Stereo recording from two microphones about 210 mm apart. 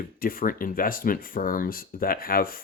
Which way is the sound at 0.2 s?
40° left (ahead or behind).